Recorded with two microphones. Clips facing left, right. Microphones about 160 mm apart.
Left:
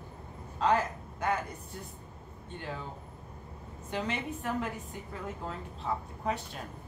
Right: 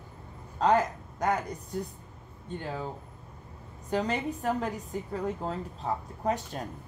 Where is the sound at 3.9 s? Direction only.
40° right (ahead or behind).